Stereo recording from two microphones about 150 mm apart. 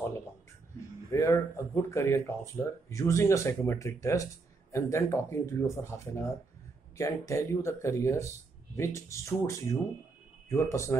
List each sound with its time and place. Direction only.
1.1 s speech: 20° left (ahead or behind)